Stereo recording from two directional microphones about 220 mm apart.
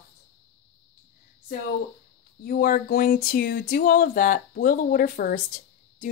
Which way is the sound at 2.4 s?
40° left (ahead or behind).